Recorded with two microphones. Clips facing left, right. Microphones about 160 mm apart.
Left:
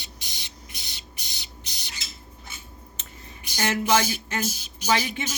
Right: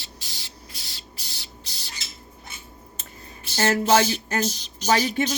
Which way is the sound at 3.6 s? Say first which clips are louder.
Right 3 dB; 35° right (ahead or behind).